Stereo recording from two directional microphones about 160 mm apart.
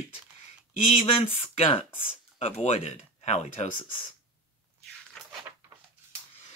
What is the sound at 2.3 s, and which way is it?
Speech, 40° left (ahead or behind).